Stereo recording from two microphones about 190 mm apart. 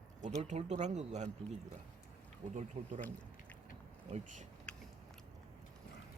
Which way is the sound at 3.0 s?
10° left (ahead or behind).